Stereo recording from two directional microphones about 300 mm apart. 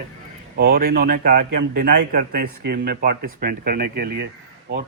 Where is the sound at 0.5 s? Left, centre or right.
Right.